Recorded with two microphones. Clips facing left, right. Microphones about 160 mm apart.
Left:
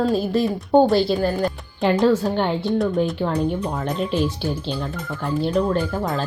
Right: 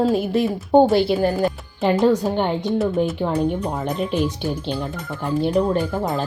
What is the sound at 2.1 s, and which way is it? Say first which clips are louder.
Speech: even; 15° right (ahead or behind).